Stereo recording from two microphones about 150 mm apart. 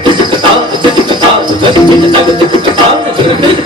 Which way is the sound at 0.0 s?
30° right (ahead or behind).